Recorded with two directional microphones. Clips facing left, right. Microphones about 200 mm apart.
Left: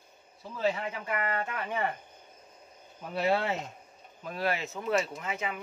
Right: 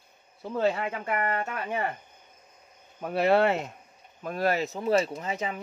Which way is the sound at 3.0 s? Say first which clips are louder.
Right 6 dB; 60° right (ahead or behind).